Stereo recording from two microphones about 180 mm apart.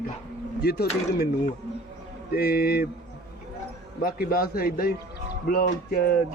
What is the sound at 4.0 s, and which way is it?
A man's voice, 55° left (ahead or behind).